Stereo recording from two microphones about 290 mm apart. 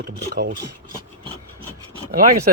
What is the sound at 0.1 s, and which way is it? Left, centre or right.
Speech, right.